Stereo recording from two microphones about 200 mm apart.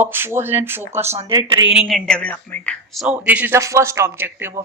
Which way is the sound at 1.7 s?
5° right (ahead or behind).